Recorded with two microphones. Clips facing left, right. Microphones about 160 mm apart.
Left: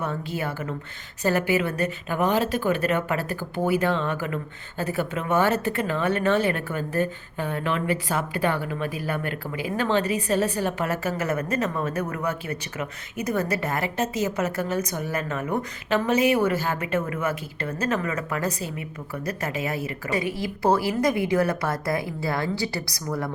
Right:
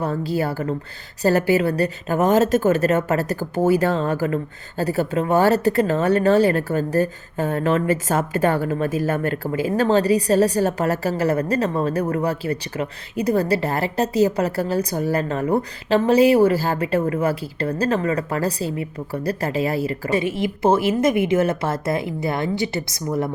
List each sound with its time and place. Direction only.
0.0 s speech: 35° right (ahead or behind)